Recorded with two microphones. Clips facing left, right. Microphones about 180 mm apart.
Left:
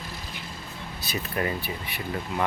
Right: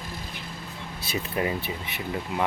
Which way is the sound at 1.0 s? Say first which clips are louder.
Right 1 dB; 25° right (ahead or behind).